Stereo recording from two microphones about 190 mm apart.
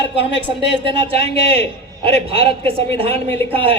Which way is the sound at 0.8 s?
30° right (ahead or behind).